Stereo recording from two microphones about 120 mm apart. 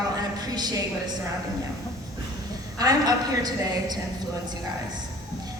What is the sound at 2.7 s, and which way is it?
A woman's voice, 30° right (ahead or behind).